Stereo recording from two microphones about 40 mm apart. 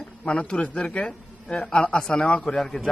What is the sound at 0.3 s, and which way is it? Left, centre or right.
A man's voice, left.